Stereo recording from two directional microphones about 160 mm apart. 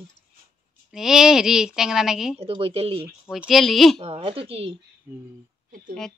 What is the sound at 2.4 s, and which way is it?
Speech, 35° right (ahead or behind).